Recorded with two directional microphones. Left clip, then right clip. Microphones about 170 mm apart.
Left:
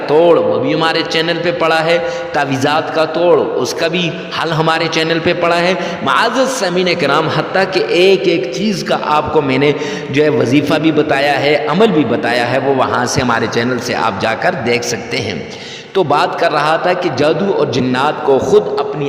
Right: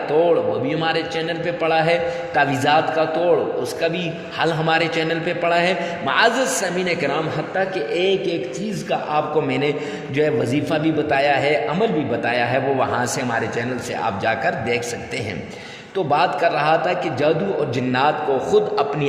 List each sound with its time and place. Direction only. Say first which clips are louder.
0.1 s a man's voice: left 8 dB; 40° left (ahead or behind)
4.4 s a man's voice: left 4 dB; 35° left (ahead or behind)
13.3 s a man's voice: left 8 dB; 50° left (ahead or behind)
14.3 s a man's voice: left 3 dB; 35° left (ahead or behind)
16.0 s a man's voice: left 6 dB; 35° left (ahead or behind)